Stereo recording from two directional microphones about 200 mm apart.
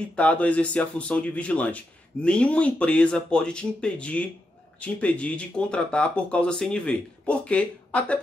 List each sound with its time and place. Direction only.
0.1 s speech: 5° left (ahead or behind)